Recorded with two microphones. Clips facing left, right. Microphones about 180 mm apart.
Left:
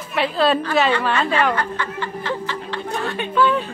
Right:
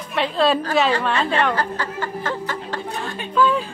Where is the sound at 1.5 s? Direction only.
40° right (ahead or behind).